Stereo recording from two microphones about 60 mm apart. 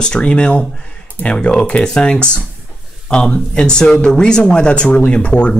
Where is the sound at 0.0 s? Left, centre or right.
Centre.